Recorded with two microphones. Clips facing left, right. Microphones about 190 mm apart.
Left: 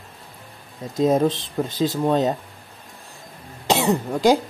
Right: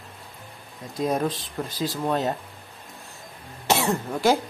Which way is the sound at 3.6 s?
15° left (ahead or behind).